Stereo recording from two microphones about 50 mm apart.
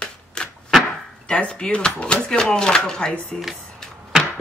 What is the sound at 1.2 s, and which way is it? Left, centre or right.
Speech, left.